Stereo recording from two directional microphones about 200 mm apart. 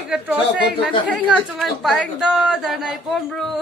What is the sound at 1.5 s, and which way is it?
Speech, centre (ahead or behind).